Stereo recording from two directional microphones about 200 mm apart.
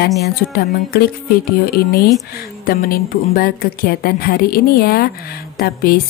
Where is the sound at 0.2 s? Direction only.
50° left (ahead or behind).